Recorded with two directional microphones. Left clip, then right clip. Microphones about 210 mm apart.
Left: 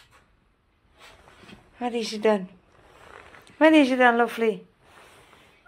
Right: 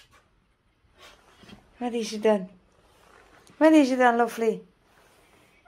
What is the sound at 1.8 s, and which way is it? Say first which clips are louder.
Speech: left 1 dB; 5° right (ahead or behind).